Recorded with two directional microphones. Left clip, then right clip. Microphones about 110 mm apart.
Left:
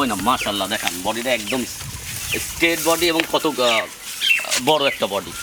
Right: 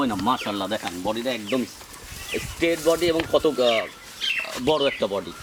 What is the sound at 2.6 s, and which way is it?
Speech, 25° left (ahead or behind).